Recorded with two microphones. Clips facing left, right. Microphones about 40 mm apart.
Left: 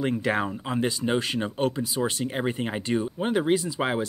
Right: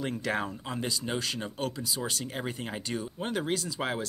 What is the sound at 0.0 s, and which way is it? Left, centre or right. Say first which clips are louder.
Speech: left 6 dB; left.